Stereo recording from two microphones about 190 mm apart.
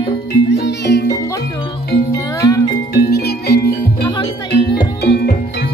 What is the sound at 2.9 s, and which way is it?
Music, 55° left (ahead or behind).